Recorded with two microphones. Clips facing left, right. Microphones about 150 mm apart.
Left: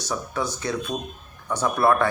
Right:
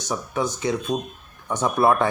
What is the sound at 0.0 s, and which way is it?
Speech, 15° right (ahead or behind).